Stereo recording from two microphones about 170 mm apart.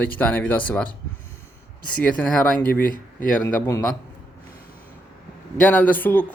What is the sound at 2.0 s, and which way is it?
Speech, 5° left (ahead or behind).